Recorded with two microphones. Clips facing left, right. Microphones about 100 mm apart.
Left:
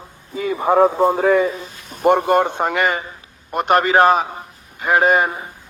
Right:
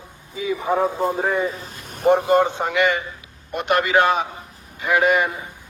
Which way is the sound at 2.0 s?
65° left (ahead or behind).